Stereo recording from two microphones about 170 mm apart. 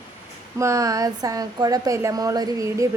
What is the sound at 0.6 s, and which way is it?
Speech, 20° right (ahead or behind).